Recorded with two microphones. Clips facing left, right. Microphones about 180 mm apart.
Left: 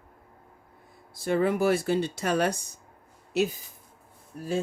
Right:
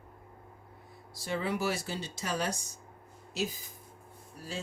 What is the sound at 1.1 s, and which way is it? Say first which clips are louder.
Speech: left 9 dB; 50° left (ahead or behind).